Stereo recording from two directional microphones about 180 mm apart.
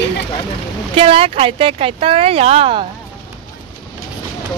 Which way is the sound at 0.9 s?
30° right (ahead or behind).